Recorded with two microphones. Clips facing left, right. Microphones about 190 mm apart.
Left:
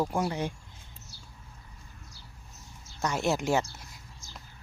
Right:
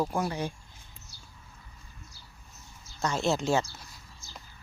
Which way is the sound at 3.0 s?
15° left (ahead or behind).